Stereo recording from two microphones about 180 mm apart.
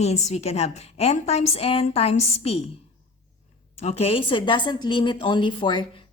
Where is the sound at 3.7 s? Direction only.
35° left (ahead or behind).